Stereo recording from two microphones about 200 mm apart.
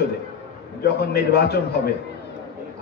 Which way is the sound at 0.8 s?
50° left (ahead or behind).